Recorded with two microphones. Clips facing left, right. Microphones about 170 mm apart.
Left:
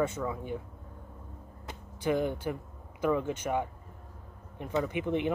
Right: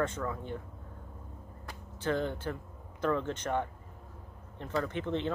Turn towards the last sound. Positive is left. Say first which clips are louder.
# left 3 dB
turn(degrees=15)  # may be behind; listen again after turning